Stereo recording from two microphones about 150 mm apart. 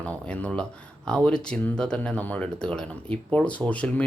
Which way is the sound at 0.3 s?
5° left (ahead or behind).